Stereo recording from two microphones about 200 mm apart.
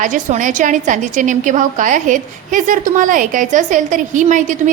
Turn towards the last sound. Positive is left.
turn(degrees=-40)  # may be behind; listen again after turning